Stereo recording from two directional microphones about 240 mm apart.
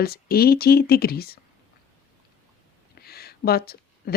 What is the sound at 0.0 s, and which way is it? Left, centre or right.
Speech, left.